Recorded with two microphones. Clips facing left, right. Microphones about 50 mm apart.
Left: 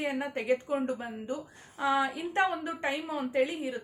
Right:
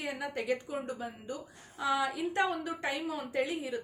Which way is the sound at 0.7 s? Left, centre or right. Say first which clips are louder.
Left 6 dB; left.